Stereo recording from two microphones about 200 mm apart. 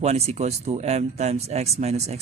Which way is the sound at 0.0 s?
30° right (ahead or behind).